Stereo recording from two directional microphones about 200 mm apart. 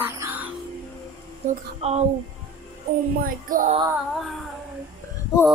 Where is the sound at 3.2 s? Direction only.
45° right (ahead or behind).